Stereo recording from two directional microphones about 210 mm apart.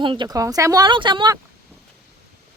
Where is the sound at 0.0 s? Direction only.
25° right (ahead or behind).